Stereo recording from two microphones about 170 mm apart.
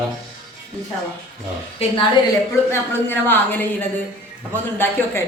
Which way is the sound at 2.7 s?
10° left (ahead or behind).